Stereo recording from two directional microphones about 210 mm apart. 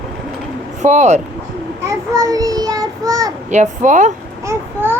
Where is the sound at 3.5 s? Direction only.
35° right (ahead or behind).